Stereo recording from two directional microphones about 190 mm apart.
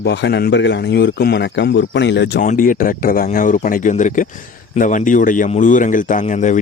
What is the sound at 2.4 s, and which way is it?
Speech, 45° left (ahead or behind).